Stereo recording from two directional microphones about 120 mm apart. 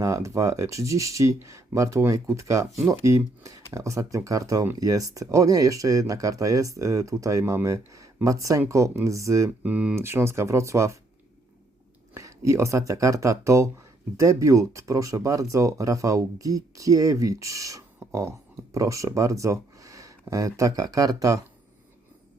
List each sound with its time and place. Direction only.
0.0 s speech: 25° right (ahead or behind)
9.6 s speech: 10° right (ahead or behind)
12.1 s speech: 25° right (ahead or behind)